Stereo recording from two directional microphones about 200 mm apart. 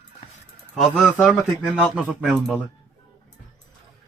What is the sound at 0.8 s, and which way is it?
A man's voice, centre (ahead or behind).